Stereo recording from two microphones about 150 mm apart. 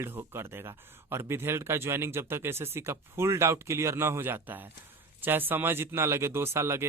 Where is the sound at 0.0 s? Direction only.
15° right (ahead or behind).